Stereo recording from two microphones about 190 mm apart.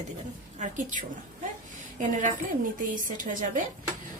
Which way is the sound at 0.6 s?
40° right (ahead or behind).